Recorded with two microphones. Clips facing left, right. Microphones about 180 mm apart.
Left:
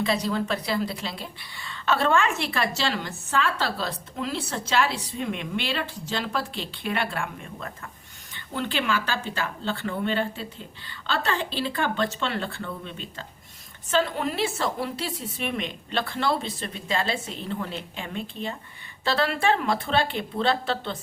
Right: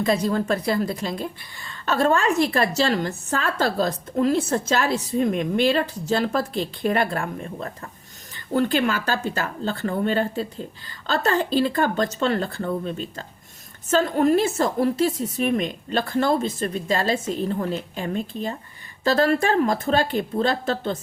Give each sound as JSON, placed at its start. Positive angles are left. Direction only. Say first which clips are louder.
{"t": 0.0, "sound": "a woman's voice", "louder": "right 4 dB", "side_deg": -45}